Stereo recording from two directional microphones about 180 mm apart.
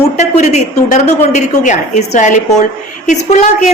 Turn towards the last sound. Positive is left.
turn(degrees=40)  # may be behind; listen again after turning